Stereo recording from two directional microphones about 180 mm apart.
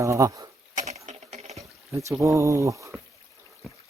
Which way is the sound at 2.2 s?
15° right (ahead or behind).